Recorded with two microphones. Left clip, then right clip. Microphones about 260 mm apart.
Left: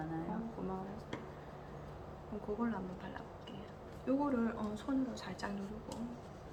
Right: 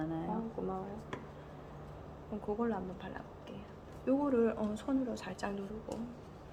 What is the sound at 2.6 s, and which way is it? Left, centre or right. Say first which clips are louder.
A woman's voice: right 4 dB; right.